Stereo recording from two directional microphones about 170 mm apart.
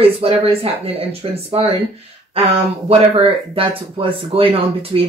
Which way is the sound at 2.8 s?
35° right (ahead or behind).